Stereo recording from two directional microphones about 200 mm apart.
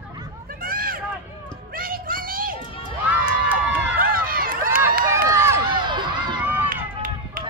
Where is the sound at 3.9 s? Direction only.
45° right (ahead or behind).